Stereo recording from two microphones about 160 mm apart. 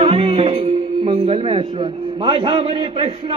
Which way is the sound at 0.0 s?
35° right (ahead or behind).